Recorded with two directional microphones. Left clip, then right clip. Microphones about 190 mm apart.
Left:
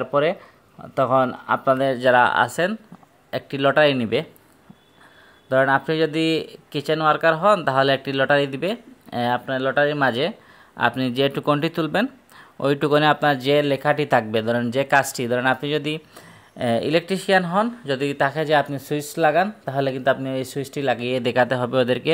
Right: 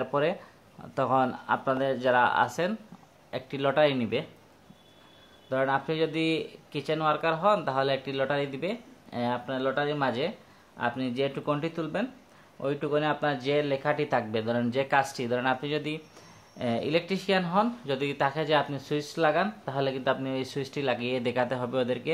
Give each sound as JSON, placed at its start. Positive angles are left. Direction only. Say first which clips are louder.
{"t": 0.0, "sound": "speech", "louder": "left 7 dB", "side_deg": 15}
{"t": 5.5, "sound": "speech", "louder": "left 9 dB", "side_deg": 35}